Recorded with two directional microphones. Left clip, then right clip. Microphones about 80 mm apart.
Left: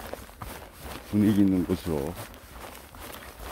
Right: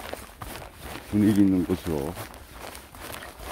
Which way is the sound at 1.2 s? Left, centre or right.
Centre.